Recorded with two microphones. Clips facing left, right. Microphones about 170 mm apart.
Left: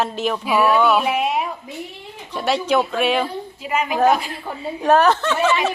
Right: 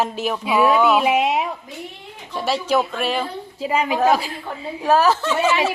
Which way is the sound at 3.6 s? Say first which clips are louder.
Right 2 dB; 30° right (ahead or behind).